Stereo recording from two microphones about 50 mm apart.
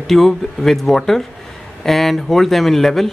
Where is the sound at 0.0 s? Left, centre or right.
Centre.